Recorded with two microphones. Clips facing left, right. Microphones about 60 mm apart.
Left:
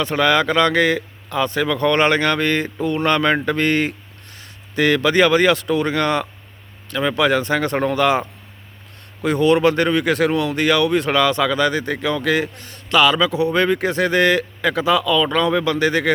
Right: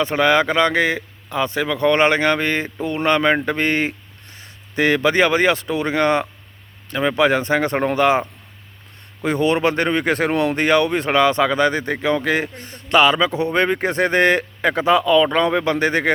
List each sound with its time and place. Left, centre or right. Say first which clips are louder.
0.0 s speech: right 1 dB; right
9.2 s speech: left 3 dB; right